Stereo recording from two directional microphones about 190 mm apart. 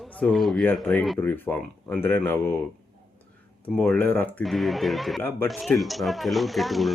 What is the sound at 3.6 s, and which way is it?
Speech, 5° left (ahead or behind).